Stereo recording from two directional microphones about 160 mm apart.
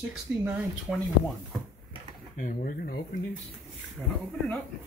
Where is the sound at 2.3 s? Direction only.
55° left (ahead or behind).